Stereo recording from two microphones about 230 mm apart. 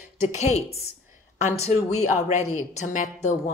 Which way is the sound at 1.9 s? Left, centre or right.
Left.